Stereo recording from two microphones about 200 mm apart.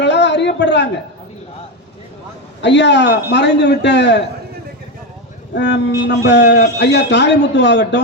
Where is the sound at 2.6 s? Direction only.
60° left (ahead or behind).